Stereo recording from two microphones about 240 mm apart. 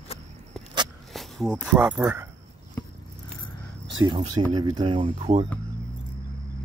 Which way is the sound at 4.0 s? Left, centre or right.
Centre.